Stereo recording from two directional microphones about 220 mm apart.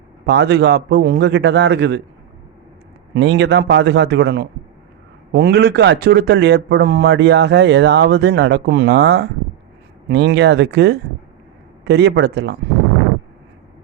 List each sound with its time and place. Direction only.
0.3 s a man's voice: 50° right (ahead or behind)
3.2 s a man's voice: 55° right (ahead or behind)